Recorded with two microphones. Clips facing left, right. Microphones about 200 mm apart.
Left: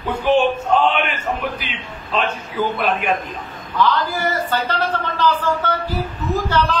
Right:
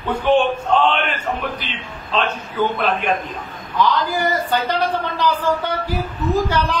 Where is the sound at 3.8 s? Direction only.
15° right (ahead or behind).